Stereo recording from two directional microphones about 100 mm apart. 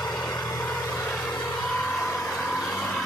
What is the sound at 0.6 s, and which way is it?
Vehicle, 20° left (ahead or behind).